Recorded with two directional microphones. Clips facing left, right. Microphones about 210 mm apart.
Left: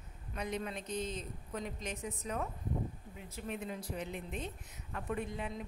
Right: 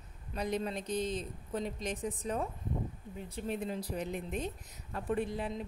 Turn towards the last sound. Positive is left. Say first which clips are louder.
# right 5 dB
turn(degrees=-35)  # may be behind; listen again after turning